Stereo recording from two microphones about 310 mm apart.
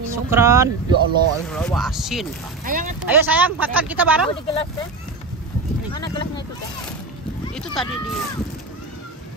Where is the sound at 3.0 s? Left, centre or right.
Centre.